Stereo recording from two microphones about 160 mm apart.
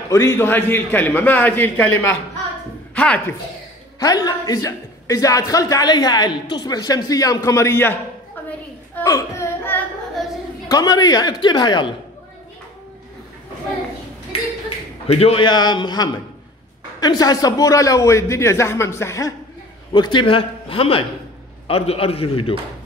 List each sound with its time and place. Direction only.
0.1 s a man's voice: 15° left (ahead or behind)
4.0 s speech: 25° left (ahead or behind)
9.0 s a sound: 20° left (ahead or behind)
10.7 s speech: 25° left (ahead or behind)
15.1 s speech: 35° left (ahead or behind); by 19.3 s 20° left (ahead or behind)
19.9 s a man's voice: 30° left (ahead or behind)